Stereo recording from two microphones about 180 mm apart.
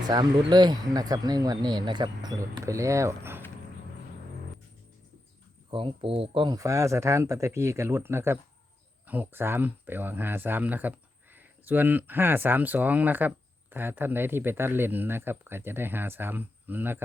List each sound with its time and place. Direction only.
0.0 s speech: 25° right (ahead or behind)
5.7 s speech: 30° right (ahead or behind); by 17.0 s 10° right (ahead or behind)